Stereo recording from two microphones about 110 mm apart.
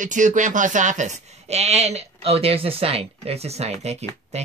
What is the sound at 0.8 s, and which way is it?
Speech, 90° right.